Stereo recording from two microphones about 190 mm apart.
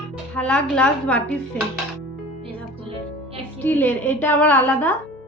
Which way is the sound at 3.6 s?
10° left (ahead or behind).